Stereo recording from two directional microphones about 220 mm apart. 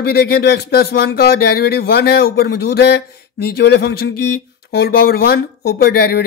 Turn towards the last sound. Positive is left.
turn(degrees=45)  # may be behind; listen again after turning